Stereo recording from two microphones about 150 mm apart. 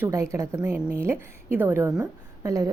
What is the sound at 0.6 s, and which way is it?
A woman's voice, 10° right (ahead or behind).